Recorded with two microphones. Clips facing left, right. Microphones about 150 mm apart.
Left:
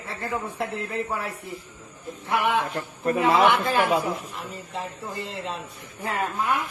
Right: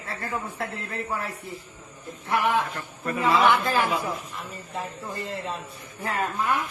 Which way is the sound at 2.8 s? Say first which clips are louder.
Left 5 dB; 30° left (ahead or behind).